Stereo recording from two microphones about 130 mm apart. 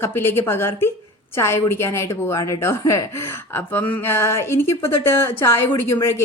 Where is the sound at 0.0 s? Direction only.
15° left (ahead or behind).